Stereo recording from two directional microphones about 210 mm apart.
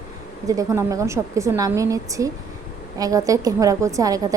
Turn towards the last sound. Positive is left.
turn(degrees=-15)  # may be behind; listen again after turning